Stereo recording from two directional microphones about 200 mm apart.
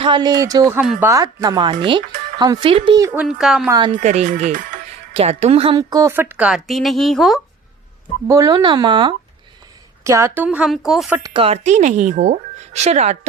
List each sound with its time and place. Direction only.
0.0 s a woman's voice: 20° right (ahead or behind)
3.1 s speech: 5° right (ahead or behind)
3.7 s speech: 20° right (ahead or behind)
3.9 s speech: 35° right (ahead or behind); by 7.4 s centre (ahead or behind)
8.3 s a woman's voice: 15° right (ahead or behind); by 11.2 s centre (ahead or behind)
11.2 s speech: 30° right (ahead or behind)